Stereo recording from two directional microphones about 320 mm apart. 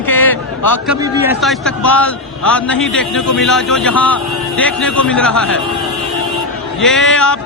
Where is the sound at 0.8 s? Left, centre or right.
Centre.